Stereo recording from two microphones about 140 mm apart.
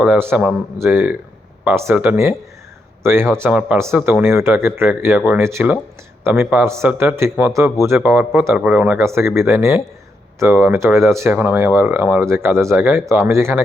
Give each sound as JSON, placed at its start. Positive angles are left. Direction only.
{"t": 0.0, "sound": "a man's voice", "side_deg": -15}